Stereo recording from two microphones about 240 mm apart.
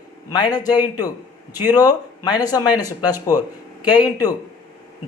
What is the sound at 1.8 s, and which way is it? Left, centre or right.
Speech, centre.